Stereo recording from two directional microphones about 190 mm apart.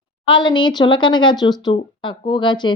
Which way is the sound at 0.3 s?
25° left (ahead or behind).